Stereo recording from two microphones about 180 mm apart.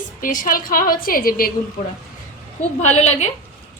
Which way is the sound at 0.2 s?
50° left (ahead or behind).